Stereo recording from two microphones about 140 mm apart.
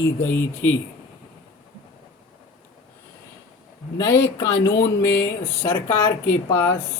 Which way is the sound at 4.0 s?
25° left (ahead or behind).